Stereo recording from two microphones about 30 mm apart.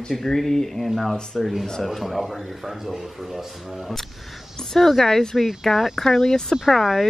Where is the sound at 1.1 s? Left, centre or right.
Left.